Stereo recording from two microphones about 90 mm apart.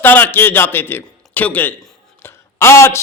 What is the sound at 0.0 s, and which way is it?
A man's voice, 20° left (ahead or behind).